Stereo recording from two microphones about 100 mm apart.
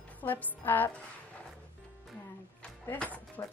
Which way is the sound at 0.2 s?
15° left (ahead or behind).